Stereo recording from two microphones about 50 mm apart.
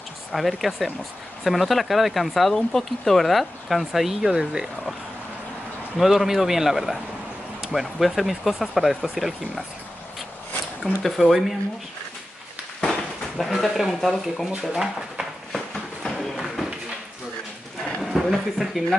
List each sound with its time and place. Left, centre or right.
0.3 s speech: centre
5.9 s speech: centre
11.0 s speech: centre
13.4 s speech: centre
15.5 s a sound: centre
18.0 s speech: centre